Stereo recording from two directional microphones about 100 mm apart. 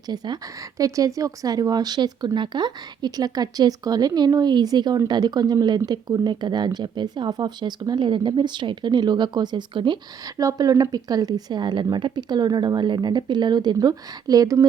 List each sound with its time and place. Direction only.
0.8 s speech: 35° right (ahead or behind); by 10.0 s 50° right (ahead or behind)
10.3 s speech: 40° right (ahead or behind)